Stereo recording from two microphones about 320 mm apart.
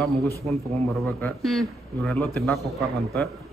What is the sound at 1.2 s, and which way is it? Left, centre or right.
A man's voice, centre.